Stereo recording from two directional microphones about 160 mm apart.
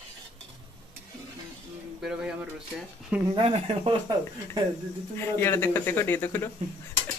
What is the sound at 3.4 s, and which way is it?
Speech, 35° right (ahead or behind).